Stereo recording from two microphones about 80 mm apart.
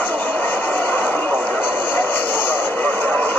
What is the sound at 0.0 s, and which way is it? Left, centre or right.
Vehicle, left.